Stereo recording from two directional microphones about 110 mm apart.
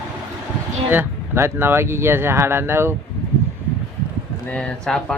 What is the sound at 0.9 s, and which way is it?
Speech, 20° right (ahead or behind).